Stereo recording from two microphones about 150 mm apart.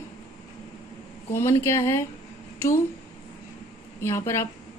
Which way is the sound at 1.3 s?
15° left (ahead or behind).